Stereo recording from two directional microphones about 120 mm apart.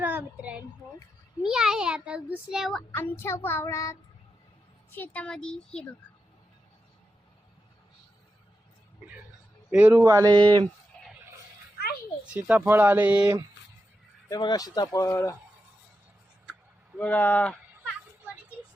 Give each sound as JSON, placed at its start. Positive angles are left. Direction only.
{"t": 0.0, "sound": "a woman's voice", "side_deg": -15}
{"t": 2.7, "sound": "child singing", "side_deg": 15}
{"t": 4.9, "sound": "speech", "side_deg": 15}
{"t": 9.6, "sound": "speech", "side_deg": -10}
{"t": 10.0, "sound": "speech", "side_deg": -30}
{"t": 12.3, "sound": "speech", "side_deg": -10}
{"t": 14.3, "sound": "child singing", "side_deg": 35}
{"t": 17.0, "sound": "speech", "side_deg": 15}